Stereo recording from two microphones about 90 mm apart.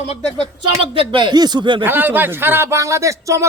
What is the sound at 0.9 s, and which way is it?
Speech, 65° right (ahead or behind).